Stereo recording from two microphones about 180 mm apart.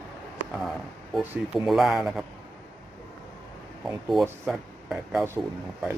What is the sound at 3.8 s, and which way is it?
Speech, centre (ahead or behind).